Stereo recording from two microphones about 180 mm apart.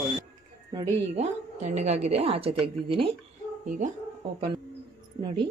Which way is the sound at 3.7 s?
45° right (ahead or behind).